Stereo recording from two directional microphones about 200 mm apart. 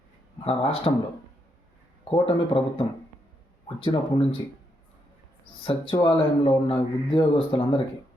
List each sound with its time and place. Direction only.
0.4 s speech: 30° left (ahead or behind)
2.0 s speech: 25° left (ahead or behind)
5.6 s speech: 25° left (ahead or behind)